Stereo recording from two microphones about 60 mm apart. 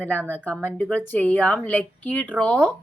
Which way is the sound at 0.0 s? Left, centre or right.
Left.